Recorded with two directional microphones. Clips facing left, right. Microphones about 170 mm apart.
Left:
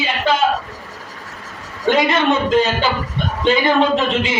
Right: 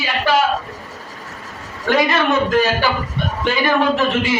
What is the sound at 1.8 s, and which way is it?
Speech, 20° left (ahead or behind).